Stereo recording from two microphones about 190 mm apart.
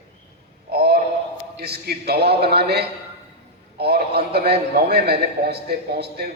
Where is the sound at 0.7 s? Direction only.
55° right (ahead or behind).